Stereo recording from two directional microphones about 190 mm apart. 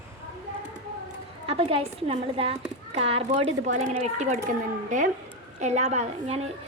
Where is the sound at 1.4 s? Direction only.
30° right (ahead or behind).